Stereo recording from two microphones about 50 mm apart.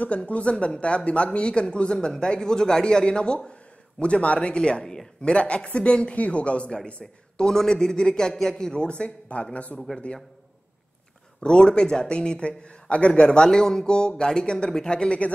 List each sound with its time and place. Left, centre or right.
0.0 s a man's voice: left
9.9 s a man's voice: centre
11.4 s a man's voice: centre